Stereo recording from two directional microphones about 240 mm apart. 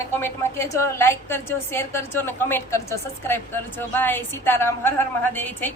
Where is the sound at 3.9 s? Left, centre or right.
Centre.